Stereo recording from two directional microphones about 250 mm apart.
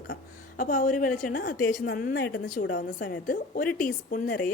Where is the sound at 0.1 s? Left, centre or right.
Left.